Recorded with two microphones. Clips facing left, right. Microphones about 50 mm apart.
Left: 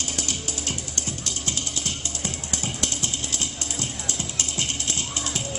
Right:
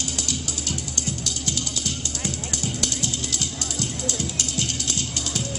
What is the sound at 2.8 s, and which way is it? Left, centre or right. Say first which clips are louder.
Music: right 1 dB; left.